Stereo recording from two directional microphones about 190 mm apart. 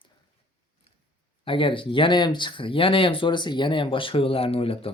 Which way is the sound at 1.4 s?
25° left (ahead or behind).